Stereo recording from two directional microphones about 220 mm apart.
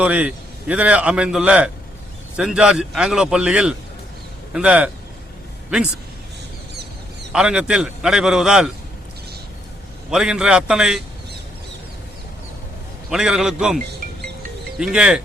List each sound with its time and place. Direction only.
0.0 s a man's voice: 5° right (ahead or behind)
7.3 s a man's voice: 5° right (ahead or behind)
10.1 s a man's voice: 5° right (ahead or behind)
13.1 s a man's voice: 5° right (ahead or behind)
14.8 s a man's voice: 5° right (ahead or behind)